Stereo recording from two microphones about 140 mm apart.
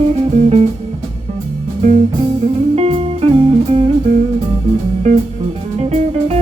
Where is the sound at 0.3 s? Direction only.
50° right (ahead or behind).